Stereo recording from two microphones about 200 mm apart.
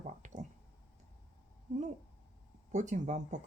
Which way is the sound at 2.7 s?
35° right (ahead or behind).